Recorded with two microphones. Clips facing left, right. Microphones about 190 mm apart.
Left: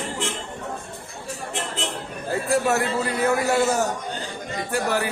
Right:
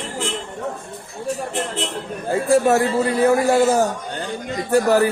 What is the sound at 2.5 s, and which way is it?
Speech, 25° right (ahead or behind).